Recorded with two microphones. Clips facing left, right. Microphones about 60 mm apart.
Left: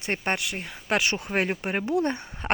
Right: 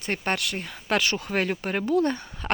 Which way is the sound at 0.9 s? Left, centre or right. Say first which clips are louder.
Even; left.